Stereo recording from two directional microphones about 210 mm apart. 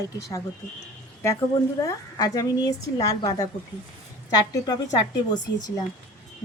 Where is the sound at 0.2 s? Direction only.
15° left (ahead or behind).